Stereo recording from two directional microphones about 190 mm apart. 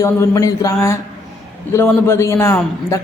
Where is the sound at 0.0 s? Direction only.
15° left (ahead or behind).